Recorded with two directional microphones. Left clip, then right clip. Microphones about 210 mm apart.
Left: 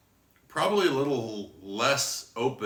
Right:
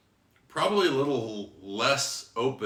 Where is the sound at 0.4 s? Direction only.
20° left (ahead or behind).